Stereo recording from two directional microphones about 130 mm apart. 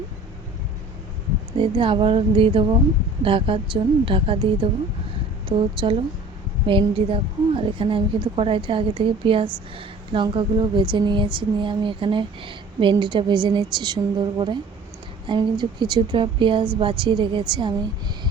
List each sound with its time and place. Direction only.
1.5 s a woman's voice: 40° right (ahead or behind)